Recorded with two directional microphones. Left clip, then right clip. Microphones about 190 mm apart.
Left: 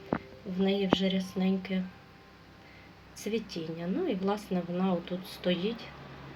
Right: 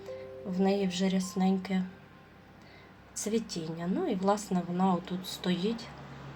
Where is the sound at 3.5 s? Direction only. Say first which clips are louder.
Even; 15° right (ahead or behind).